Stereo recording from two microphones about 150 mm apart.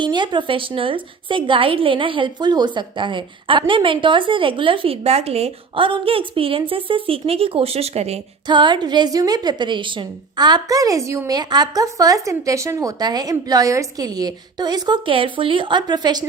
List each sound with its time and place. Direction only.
0.0 s a woman's voice: 30° right (ahead or behind)
8.4 s a woman's voice: 30° right (ahead or behind)